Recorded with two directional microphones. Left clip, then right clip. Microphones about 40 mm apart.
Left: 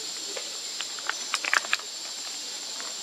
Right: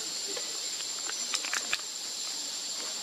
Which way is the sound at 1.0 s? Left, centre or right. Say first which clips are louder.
Left 7 dB; left.